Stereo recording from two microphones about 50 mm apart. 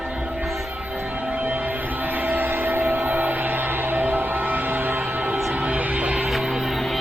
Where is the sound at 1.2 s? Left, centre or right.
Right.